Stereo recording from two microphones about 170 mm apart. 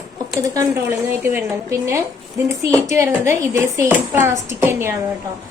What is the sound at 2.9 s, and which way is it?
A woman's voice, 15° right (ahead or behind).